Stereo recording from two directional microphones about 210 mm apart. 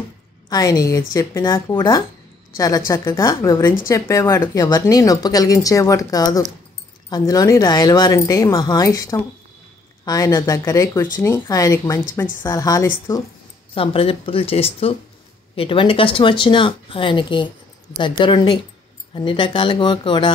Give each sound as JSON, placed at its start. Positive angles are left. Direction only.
{"t": 0.5, "sound": "a woman's voice", "side_deg": 15}
{"t": 13.7, "sound": "speech", "side_deg": 25}